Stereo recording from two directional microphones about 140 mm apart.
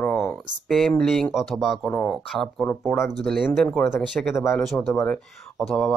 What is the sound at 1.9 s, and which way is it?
Speech, 15° left (ahead or behind).